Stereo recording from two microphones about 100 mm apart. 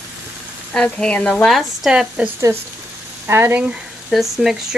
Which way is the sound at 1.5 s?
Centre (ahead or behind).